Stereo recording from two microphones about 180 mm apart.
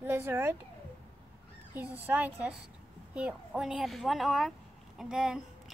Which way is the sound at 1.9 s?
10° right (ahead or behind).